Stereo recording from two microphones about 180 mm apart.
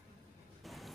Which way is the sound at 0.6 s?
Centre (ahead or behind).